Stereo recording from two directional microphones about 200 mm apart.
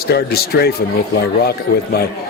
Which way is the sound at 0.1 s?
50° left (ahead or behind).